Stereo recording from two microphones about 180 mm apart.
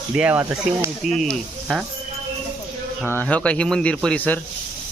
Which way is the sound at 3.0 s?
10° left (ahead or behind).